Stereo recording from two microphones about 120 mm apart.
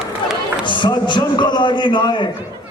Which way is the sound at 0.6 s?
40° left (ahead or behind).